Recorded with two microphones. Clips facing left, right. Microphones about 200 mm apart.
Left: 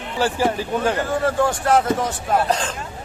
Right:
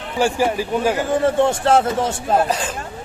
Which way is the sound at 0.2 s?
15° right (ahead or behind).